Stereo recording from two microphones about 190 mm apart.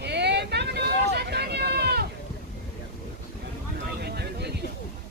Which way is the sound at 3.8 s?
60° right (ahead or behind).